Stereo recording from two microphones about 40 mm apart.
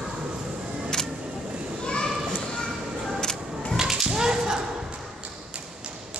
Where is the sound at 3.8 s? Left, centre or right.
Centre.